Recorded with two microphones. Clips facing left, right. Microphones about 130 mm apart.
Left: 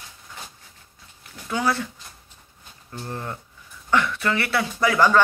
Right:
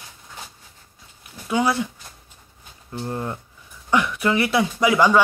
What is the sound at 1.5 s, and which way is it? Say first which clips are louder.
Speech: right 3 dB; 15° right (ahead or behind).